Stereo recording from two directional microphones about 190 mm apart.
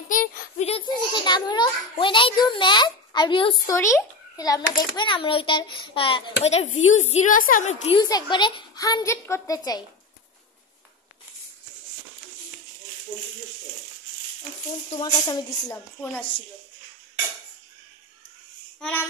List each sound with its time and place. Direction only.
0.1 s a sound: 40° left (ahead or behind); by 3.7 s 25° left (ahead or behind)
3.7 s a child's voice: 15° left (ahead or behind); by 7.7 s 45° left (ahead or behind)
7.8 s a child's voice: 25° left (ahead or behind)
15.0 s speech: 20° left (ahead or behind)
18.8 s child singing: 5° left (ahead or behind)